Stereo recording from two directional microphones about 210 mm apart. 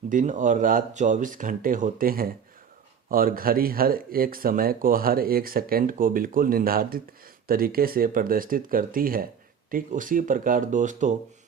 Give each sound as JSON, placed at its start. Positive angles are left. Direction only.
{"t": 0.1, "sound": "speech", "side_deg": -40}